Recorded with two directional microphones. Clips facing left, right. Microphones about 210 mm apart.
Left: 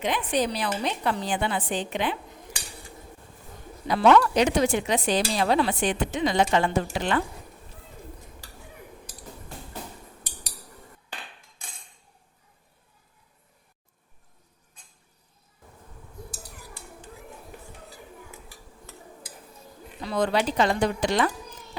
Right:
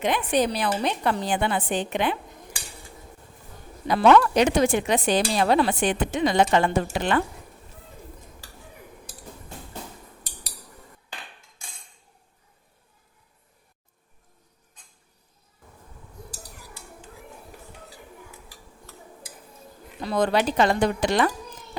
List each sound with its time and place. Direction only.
0.0 s speech: 55° right (ahead or behind)
3.8 s speech: 55° right (ahead or behind)
20.0 s speech: 50° right (ahead or behind)